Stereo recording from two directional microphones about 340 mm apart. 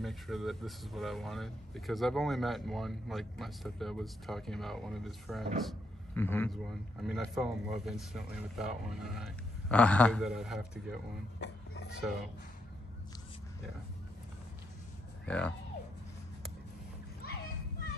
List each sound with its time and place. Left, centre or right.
0.0 s speech: centre
11.3 s a sound: left
15.2 s speech: centre
17.2 s children playing: left